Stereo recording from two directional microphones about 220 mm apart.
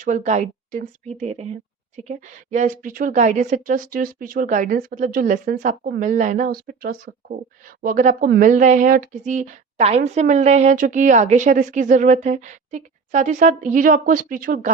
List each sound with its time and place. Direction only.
0.0 s speech: 35° right (ahead or behind)